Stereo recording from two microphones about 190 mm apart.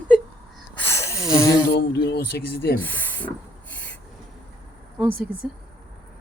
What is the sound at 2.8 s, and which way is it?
Speech, 10° left (ahead or behind).